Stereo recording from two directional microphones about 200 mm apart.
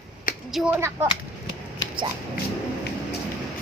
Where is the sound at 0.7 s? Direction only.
15° right (ahead or behind).